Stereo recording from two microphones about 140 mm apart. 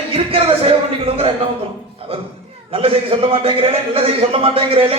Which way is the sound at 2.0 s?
45° right (ahead or behind).